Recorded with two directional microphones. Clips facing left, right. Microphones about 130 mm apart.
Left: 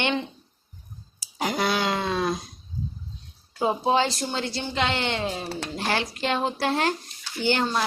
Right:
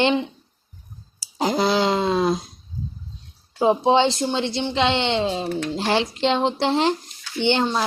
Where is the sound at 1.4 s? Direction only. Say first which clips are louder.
Right 5 dB; 25° right (ahead or behind).